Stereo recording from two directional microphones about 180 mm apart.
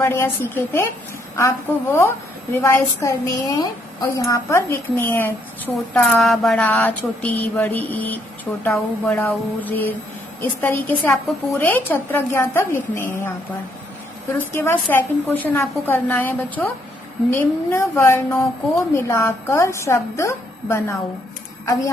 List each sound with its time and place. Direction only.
0.0 s a woman's voice: 15° left (ahead or behind)
14.5 s a woman's voice: 10° left (ahead or behind)